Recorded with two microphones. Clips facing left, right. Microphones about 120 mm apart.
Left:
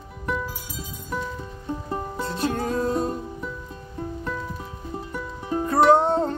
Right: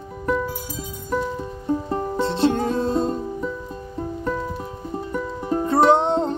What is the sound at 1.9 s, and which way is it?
Music, 25° right (ahead or behind).